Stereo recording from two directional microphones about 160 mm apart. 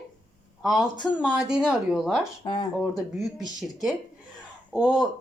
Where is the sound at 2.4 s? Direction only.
30° left (ahead or behind).